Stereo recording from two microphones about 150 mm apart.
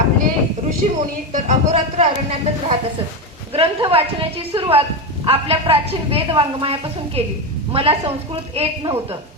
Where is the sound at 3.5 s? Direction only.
35° right (ahead or behind).